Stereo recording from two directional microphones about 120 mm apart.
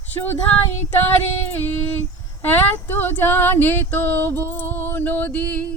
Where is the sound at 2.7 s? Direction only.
15° left (ahead or behind).